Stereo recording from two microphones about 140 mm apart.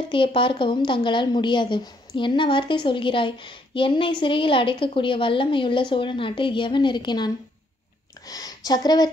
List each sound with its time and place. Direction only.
0.1 s a woman's voice: 40° left (ahead or behind)